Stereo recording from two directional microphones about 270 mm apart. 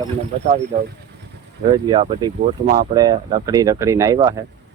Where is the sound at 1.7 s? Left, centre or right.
Centre.